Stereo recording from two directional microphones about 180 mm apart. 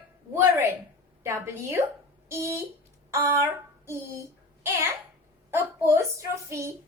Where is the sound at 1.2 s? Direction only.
15° right (ahead or behind).